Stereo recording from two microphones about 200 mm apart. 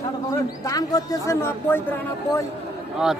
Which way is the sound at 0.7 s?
20° left (ahead or behind).